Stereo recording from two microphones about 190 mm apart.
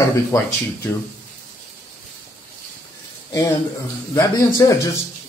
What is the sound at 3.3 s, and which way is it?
Speech, 15° left (ahead or behind).